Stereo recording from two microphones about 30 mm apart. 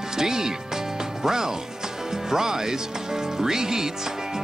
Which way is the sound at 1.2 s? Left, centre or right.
Centre.